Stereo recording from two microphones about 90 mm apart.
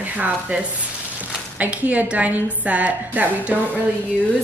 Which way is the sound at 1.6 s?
20° right (ahead or behind).